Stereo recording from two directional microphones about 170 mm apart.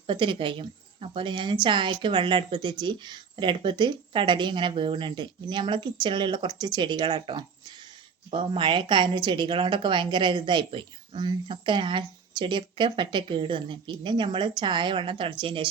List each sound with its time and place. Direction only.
0.1 s speech: 30° right (ahead or behind)